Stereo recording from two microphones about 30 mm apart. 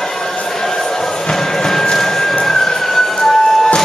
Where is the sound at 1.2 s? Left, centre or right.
Centre.